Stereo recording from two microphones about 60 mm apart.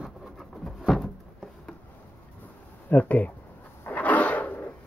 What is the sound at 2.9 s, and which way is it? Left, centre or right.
Speech, left.